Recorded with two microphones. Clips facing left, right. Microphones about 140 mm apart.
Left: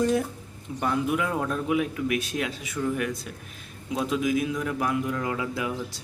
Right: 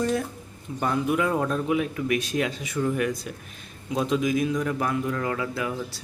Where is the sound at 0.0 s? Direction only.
10° left (ahead or behind).